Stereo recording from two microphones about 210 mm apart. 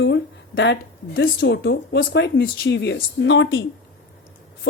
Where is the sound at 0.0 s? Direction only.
60° left (ahead or behind).